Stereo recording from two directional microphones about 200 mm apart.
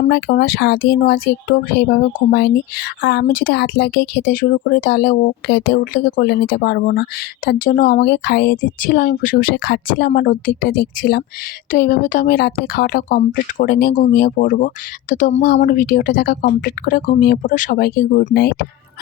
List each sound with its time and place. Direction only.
0.1 s speech: 55° left (ahead or behind)
15.5 s speech: 50° left (ahead or behind)